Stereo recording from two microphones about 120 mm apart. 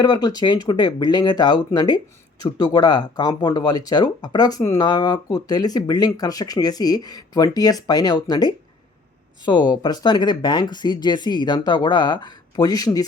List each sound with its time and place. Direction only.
0.0 s speech: 35° left (ahead or behind)